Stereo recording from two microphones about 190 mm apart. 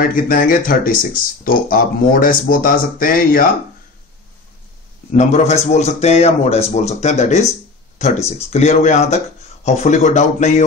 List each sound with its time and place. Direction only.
0.0 s speech: 50° left (ahead or behind)
5.1 s a man's voice: 35° left (ahead or behind)